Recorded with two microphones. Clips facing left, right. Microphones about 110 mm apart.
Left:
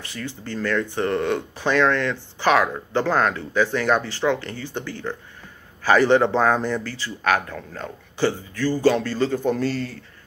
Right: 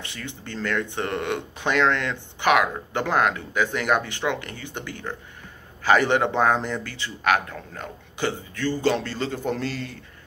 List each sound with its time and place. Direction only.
0.0 s speech: 25° right (ahead or behind)
9.2 s a man's voice: 35° left (ahead or behind)